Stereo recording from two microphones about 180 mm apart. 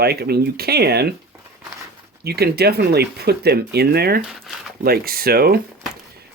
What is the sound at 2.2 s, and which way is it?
Speech, 60° right (ahead or behind).